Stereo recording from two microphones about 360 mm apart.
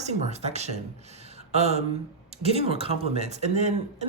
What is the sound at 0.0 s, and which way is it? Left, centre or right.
Speech, centre.